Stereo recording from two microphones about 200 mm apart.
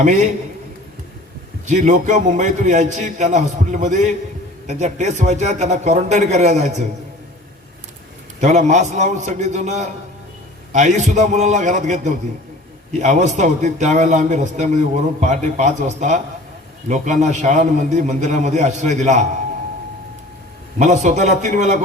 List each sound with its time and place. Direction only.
0.0 s a man's voice: 40° right (ahead or behind)
1.6 s a man's voice: 35° right (ahead or behind)
8.4 s a man's voice: 35° right (ahead or behind)
20.7 s a man's voice: 35° right (ahead or behind)